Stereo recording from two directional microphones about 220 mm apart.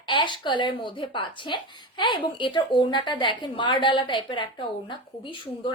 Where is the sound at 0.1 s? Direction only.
20° left (ahead or behind).